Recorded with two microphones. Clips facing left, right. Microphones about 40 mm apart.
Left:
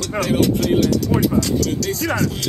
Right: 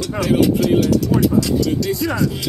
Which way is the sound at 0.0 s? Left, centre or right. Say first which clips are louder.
Right 2 dB; left.